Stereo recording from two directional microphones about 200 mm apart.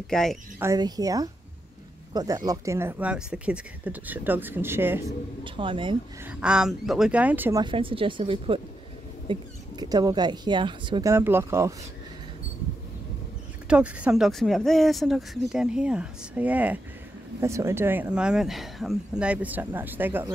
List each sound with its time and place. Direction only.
0.1 s speech: centre (ahead or behind)
0.6 s speech: 15° right (ahead or behind)
5.4 s speech: 25° right (ahead or behind)
6.4 s speech: 5° right (ahead or behind)
7.6 s speech: 25° right (ahead or behind)
13.7 s speech: 5° right (ahead or behind)